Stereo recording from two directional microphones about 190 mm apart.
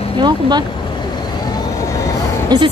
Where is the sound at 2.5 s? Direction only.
20° right (ahead or behind).